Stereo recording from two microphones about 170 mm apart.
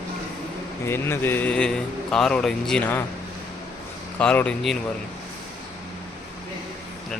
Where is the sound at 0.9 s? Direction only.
15° left (ahead or behind).